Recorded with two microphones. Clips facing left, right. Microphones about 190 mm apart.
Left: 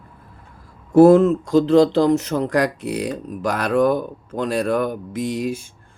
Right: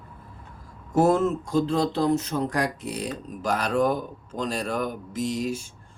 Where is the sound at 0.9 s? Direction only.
65° left (ahead or behind).